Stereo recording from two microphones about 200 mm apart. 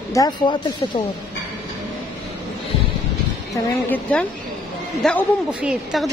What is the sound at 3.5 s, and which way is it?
A woman's voice, 10° left (ahead or behind).